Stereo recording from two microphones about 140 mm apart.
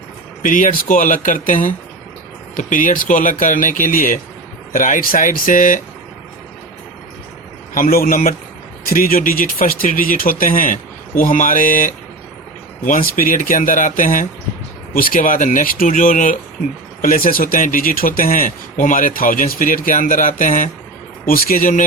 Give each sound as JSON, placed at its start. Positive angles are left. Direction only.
{"t": 0.4, "sound": "speech", "side_deg": 75}
{"t": 7.7, "sound": "speech", "side_deg": 85}
{"t": 17.0, "sound": "speech", "side_deg": 80}
{"t": 21.2, "sound": "speech", "side_deg": 90}